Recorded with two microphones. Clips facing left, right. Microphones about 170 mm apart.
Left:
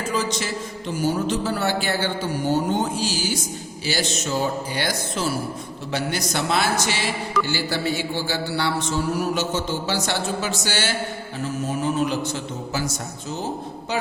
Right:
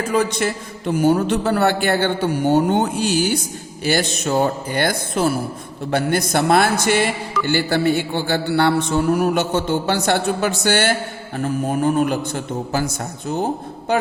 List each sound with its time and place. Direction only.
0.0 s a man's voice: 60° right (ahead or behind)